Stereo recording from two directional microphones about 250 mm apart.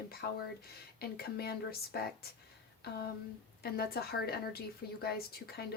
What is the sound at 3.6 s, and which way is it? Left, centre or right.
Speech, left.